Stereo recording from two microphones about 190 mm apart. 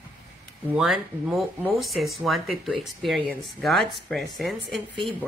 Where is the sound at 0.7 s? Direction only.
5° right (ahead or behind).